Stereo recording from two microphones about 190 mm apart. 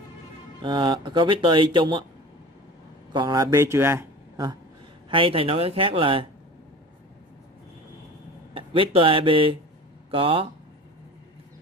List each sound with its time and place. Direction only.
0.6 s speech: 25° right (ahead or behind)
3.1 s a man's voice: 20° right (ahead or behind)
5.1 s speech: 30° right (ahead or behind)
8.5 s speech: 30° right (ahead or behind)